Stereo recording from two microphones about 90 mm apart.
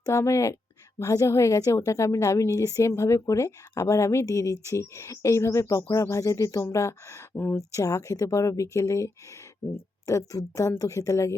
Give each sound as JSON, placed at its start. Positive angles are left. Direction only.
{"t": 0.0, "sound": "a woman's voice", "side_deg": 35}
{"t": 7.3, "sound": "speech", "side_deg": 25}
{"t": 7.8, "sound": "a woman's voice", "side_deg": 40}